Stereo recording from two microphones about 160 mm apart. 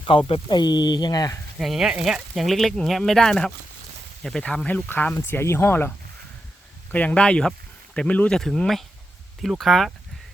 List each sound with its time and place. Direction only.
0.0 s speech: 35° left (ahead or behind)
1.5 s speech: centre (ahead or behind); by 5.9 s 15° left (ahead or behind)
6.9 s speech: 5° left (ahead or behind)